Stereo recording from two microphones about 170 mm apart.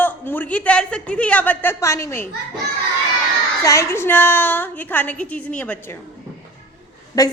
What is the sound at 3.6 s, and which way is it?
A man's voice, 20° left (ahead or behind).